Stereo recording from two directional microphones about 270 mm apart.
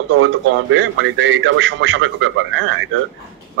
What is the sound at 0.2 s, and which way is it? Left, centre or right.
A man's voice, right.